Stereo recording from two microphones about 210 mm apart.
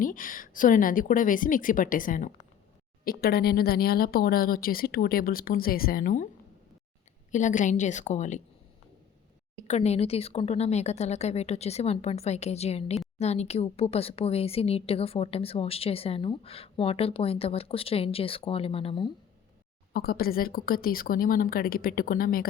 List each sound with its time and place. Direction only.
0.0 s speech: 40° left (ahead or behind)
7.3 s speech: 35° left (ahead or behind)
9.6 s speech: 30° left (ahead or behind)
19.9 s speech: 45° left (ahead or behind)